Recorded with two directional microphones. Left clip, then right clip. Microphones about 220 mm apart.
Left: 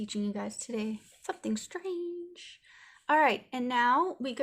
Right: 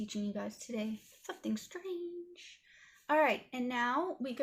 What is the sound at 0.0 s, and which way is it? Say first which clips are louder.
Speech: left 4 dB; 40° left (ahead or behind).